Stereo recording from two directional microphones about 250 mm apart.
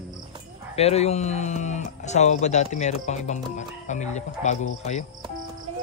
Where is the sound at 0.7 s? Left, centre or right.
Left.